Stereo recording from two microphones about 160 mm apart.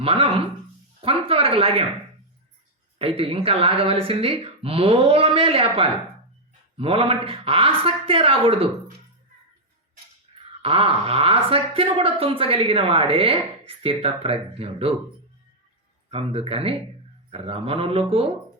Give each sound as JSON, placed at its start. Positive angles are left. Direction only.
{"t": 0.0, "sound": "speech", "side_deg": -35}
{"t": 3.0, "sound": "speech", "side_deg": -35}
{"t": 10.6, "sound": "speech", "side_deg": -35}
{"t": 16.0, "sound": "speech", "side_deg": -35}